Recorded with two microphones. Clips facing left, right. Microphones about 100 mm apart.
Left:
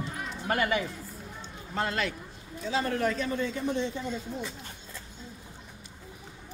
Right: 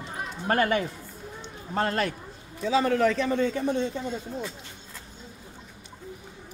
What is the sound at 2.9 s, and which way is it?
Speech, 90° right.